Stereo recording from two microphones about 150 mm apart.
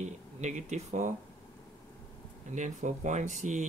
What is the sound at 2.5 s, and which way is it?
Speech, 55° right (ahead or behind).